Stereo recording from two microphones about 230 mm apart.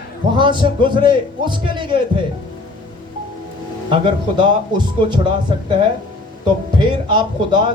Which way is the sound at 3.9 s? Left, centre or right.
Right.